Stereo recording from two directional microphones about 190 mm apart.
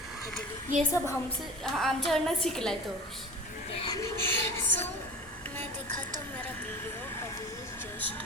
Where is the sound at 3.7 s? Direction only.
30° left (ahead or behind).